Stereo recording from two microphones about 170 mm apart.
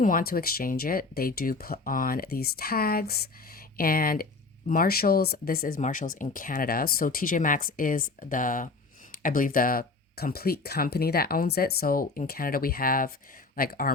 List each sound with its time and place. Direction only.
0.0 s speech: 60° left (ahead or behind)